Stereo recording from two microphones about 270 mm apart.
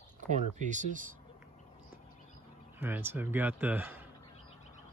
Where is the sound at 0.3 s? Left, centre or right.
Right.